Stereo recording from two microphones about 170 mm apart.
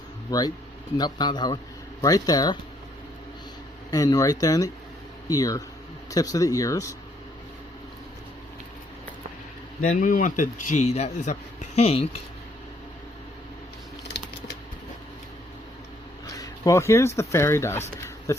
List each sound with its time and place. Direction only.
0.3 s speech: 25° left (ahead or behind)
3.9 s speech: 20° left (ahead or behind)
9.8 s speech: 50° left (ahead or behind)
16.2 s speech: 20° left (ahead or behind)
18.3 s a sound: 15° left (ahead or behind)